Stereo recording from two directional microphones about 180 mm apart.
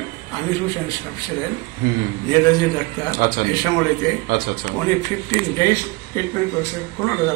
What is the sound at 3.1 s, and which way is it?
Speech, 55° right (ahead or behind).